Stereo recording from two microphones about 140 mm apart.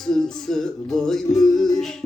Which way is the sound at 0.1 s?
5° left (ahead or behind).